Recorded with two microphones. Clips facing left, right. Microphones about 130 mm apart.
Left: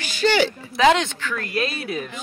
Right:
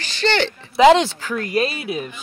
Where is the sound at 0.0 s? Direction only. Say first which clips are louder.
Left 1 dB; 10° left (ahead or behind).